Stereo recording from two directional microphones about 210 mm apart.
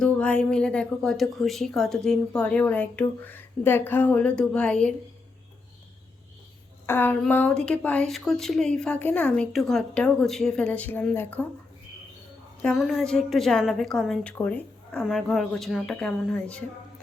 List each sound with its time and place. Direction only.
0.0 s speech: 5° left (ahead or behind)
6.8 s speech: 10° left (ahead or behind)
12.6 s speech: centre (ahead or behind)